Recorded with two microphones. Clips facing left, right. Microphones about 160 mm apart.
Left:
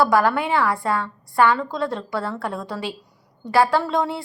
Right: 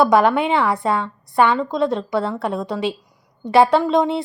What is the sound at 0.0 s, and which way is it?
A woman's voice, 20° right (ahead or behind).